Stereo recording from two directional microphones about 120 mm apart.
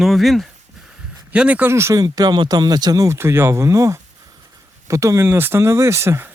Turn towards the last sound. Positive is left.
turn(degrees=-20)  # may be behind; listen again after turning